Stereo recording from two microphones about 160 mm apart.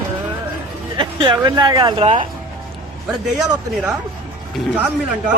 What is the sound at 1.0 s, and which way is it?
Speech, 30° right (ahead or behind).